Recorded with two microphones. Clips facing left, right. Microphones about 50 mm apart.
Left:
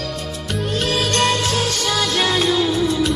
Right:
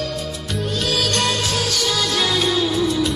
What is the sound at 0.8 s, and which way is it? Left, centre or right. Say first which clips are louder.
Music: left 2 dB; left.